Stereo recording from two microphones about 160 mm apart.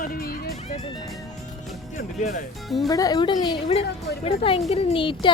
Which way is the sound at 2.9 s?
25° left (ahead or behind).